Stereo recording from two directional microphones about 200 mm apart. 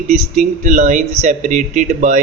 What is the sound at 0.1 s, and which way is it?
A man's voice, 40° right (ahead or behind).